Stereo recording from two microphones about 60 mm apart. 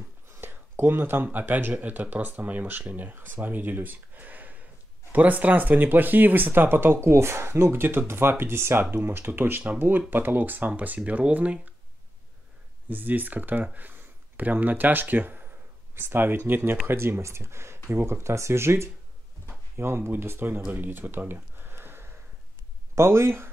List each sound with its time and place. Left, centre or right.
0.3 s speech: right
12.9 s speech: right